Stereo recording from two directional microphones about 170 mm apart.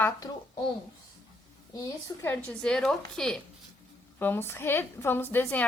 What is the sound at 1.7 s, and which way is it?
A woman's voice, 20° left (ahead or behind).